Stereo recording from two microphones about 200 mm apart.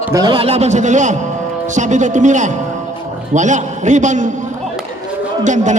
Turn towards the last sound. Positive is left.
turn(degrees=-40)  # may be behind; listen again after turning